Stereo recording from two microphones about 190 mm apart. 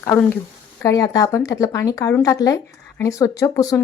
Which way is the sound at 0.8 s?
20° left (ahead or behind).